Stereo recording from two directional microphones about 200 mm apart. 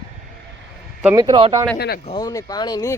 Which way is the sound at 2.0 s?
20° left (ahead or behind).